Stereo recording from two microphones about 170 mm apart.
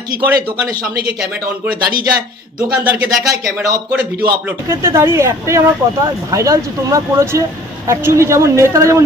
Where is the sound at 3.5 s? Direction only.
10° right (ahead or behind).